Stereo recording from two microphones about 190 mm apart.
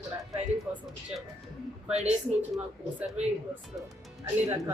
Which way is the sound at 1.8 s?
5° right (ahead or behind).